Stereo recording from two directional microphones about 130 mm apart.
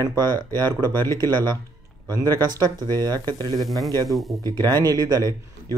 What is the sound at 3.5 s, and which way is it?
Speech, centre (ahead or behind).